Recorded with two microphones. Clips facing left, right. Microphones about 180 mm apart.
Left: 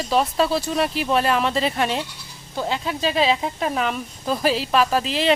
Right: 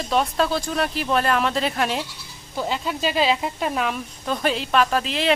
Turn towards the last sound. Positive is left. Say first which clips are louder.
# left 1 dB
turn(degrees=0)  # may be behind; listen again after turning